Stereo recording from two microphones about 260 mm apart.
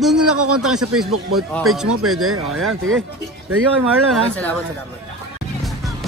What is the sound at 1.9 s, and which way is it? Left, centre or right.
Speech, right.